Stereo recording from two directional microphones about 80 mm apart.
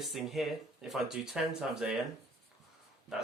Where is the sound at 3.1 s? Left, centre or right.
Centre.